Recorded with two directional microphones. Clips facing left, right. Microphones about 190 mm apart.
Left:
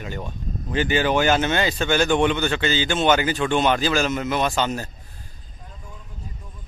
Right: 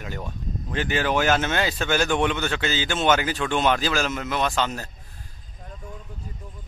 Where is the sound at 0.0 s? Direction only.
Centre (ahead or behind).